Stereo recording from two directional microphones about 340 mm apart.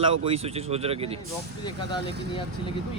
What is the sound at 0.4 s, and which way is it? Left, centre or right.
Speech, centre.